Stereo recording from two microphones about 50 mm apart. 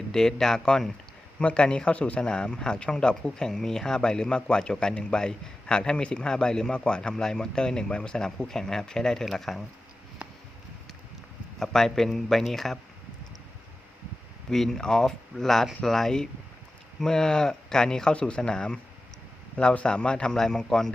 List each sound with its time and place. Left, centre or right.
0.1 s speech: centre
11.6 s speech: centre
14.5 s speech: centre